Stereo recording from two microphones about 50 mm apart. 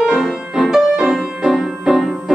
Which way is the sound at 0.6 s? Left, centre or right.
Centre.